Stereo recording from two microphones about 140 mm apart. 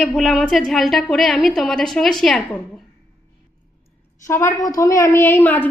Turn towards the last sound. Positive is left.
turn(degrees=15)  # may be behind; listen again after turning